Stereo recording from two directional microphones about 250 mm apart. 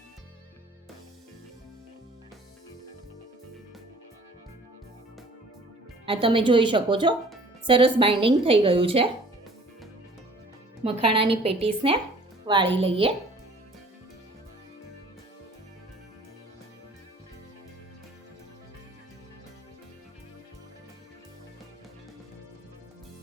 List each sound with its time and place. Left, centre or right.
6.1 s a woman's voice: right
11.1 s a woman's voice: right